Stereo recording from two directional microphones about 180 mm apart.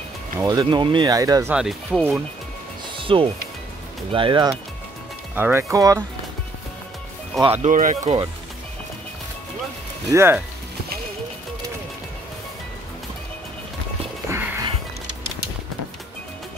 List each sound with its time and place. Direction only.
0.4 s speech: 20° right (ahead or behind)
1.5 s speech: 5° right (ahead or behind)
3.0 s music: 30° right (ahead or behind)
4.1 s speech: 25° right (ahead or behind)
5.3 s speech: 10° right (ahead or behind)
7.4 s speech: 40° right (ahead or behind)
10.1 s speech: 15° right (ahead or behind)
14.3 s music: 15° right (ahead or behind)